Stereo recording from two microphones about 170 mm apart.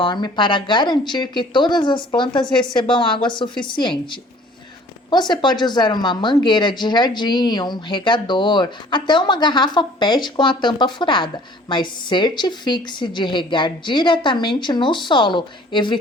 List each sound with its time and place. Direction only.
0.0 s a woman's voice: 25° left (ahead or behind)